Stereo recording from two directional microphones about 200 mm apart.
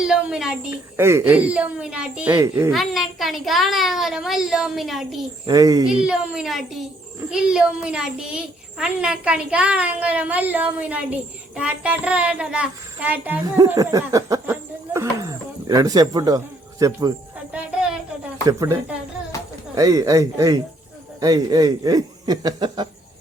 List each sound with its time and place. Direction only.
0.0 s speech: 5° right (ahead or behind)
2.7 s a child's voice: centre (ahead or behind)
5.5 s speech: 15° right (ahead or behind)
6.0 s a child's voice: 5° right (ahead or behind)
17.5 s a sound: 5° right (ahead or behind)
18.4 s speech: 20° right (ahead or behind)